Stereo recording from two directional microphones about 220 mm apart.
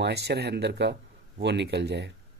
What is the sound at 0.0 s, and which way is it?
Speech, 50° right (ahead or behind).